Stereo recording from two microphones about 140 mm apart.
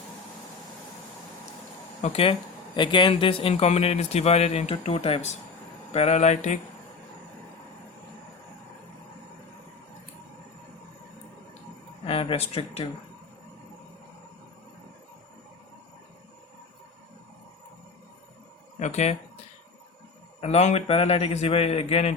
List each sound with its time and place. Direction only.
2.0 s a man's voice: 50° left (ahead or behind)
2.7 s a man's voice: 35° left (ahead or behind); by 6.6 s 55° left (ahead or behind)
12.0 s speech: 40° left (ahead or behind)
18.8 s speech: 55° left (ahead or behind)
20.4 s a man's voice: 50° left (ahead or behind)